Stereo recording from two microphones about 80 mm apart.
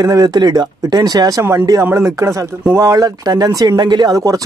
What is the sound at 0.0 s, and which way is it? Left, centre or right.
Speech, right.